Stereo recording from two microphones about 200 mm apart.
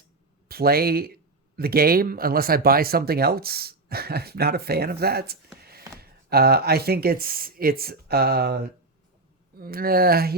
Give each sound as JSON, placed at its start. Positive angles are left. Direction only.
{"t": 0.4, "sound": "speech", "side_deg": -50}